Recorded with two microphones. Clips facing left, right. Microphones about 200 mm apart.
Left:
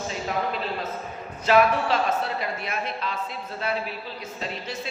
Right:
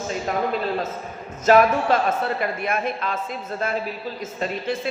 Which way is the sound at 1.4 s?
45° right (ahead or behind).